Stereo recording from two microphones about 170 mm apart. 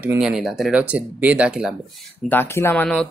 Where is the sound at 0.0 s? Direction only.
5° right (ahead or behind).